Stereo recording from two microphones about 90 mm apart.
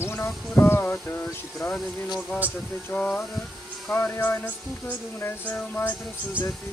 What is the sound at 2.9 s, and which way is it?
Speech, 15° left (ahead or behind).